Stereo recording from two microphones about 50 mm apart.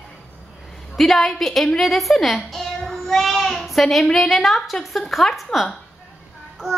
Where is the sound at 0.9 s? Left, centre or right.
Centre.